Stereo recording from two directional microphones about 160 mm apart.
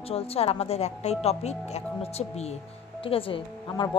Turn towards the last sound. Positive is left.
turn(degrees=35)  # may be behind; listen again after turning